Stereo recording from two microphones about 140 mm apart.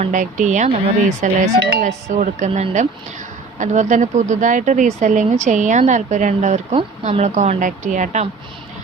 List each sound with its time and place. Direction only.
0.0 s speech: 65° right (ahead or behind)